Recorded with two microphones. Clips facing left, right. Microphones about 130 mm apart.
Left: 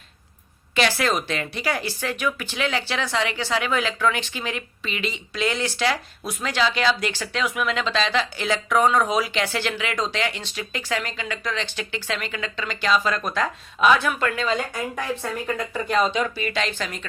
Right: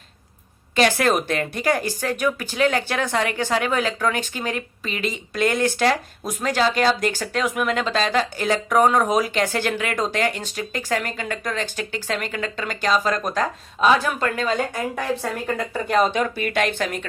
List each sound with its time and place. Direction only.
0.8 s a woman's voice: 50° right (ahead or behind)